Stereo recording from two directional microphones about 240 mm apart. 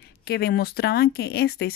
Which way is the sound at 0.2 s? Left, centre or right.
Left.